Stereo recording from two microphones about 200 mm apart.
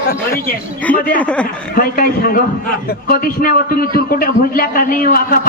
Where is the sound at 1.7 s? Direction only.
45° left (ahead or behind).